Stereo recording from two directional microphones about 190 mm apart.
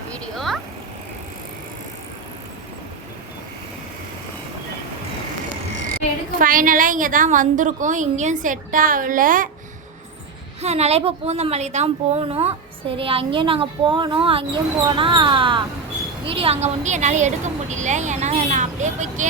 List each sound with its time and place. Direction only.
0.1 s vehicle: centre (ahead or behind)
6.4 s a woman's voice: 45° right (ahead or behind)
10.6 s a woman's voice: 35° right (ahead or behind)